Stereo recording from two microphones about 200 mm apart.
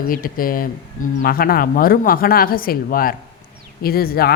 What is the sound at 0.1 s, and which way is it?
A woman's voice, 45° left (ahead or behind).